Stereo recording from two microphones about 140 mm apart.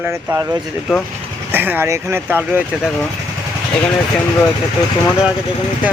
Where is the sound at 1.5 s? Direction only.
15° right (ahead or behind).